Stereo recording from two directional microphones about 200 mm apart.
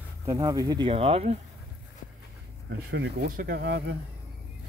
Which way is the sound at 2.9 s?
55° right (ahead or behind).